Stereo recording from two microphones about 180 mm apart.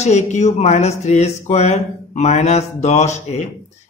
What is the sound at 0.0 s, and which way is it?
A man's voice, 40° left (ahead or behind).